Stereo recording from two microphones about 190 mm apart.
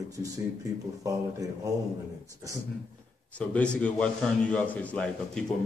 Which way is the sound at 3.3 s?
5° left (ahead or behind).